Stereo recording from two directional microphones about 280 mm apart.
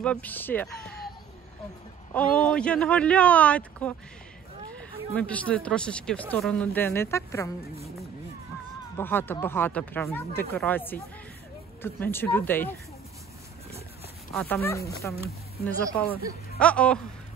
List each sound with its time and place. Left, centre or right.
0.0 s speech: centre
2.1 s speech: centre
8.9 s speech: centre
14.3 s speech: centre
15.1 s speech: centre